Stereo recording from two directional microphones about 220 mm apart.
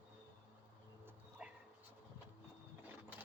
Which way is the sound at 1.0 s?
5° right (ahead or behind).